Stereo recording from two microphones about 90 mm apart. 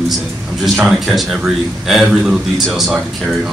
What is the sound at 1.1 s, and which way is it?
A man's voice, 5° right (ahead or behind).